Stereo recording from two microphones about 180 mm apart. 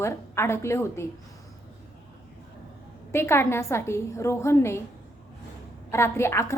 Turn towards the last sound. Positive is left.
turn(degrees=15)  # may be behind; listen again after turning